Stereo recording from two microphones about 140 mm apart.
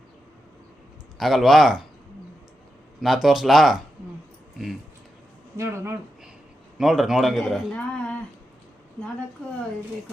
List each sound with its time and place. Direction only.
1.2 s speech: centre (ahead or behind)
3.0 s speech: centre (ahead or behind)
5.5 s speech: 20° right (ahead or behind)
6.7 s a man's voice: centre (ahead or behind)